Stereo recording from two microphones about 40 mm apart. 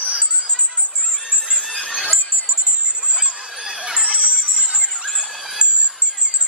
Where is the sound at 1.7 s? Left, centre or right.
Centre.